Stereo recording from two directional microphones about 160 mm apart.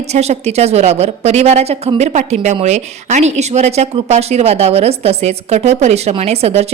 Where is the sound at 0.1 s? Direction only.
40° right (ahead or behind).